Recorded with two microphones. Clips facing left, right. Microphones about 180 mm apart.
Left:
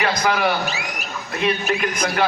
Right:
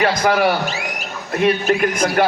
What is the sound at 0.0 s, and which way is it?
A man's voice, 50° right (ahead or behind).